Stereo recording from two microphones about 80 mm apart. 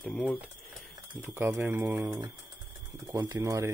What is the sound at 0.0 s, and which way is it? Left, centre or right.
Speech, centre.